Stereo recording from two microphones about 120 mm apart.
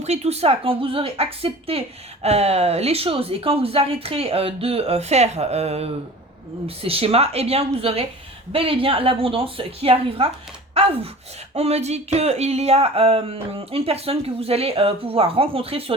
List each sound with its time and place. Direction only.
0.0 s speech: 60° right (ahead or behind)